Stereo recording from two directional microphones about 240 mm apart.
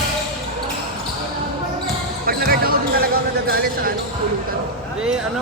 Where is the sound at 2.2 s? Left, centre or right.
Right.